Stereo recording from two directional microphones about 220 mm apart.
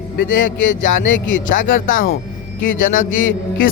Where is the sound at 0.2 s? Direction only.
35° left (ahead or behind).